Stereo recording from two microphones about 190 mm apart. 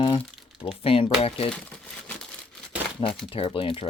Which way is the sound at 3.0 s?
25° left (ahead or behind).